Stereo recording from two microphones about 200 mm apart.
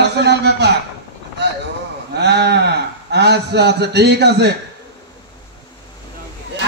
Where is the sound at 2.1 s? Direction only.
55° right (ahead or behind).